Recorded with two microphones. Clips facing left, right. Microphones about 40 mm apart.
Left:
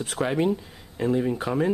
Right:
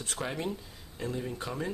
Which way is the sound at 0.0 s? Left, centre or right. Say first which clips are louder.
Left 9 dB; centre.